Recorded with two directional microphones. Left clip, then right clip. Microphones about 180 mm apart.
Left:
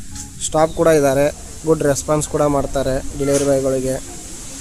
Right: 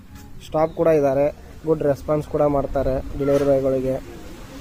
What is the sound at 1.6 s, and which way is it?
Speech, 20° left (ahead or behind).